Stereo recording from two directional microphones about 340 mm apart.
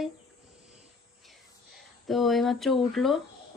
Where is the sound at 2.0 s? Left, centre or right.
Centre.